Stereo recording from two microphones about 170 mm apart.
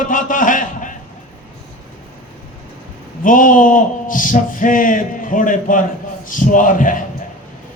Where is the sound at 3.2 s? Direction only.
50° left (ahead or behind).